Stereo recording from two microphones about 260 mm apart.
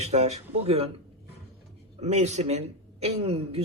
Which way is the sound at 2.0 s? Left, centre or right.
Right.